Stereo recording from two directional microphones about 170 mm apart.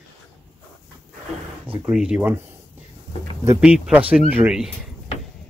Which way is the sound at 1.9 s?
5° right (ahead or behind).